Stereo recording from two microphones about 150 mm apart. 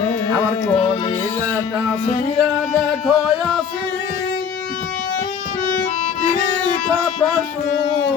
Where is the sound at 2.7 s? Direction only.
Centre (ahead or behind).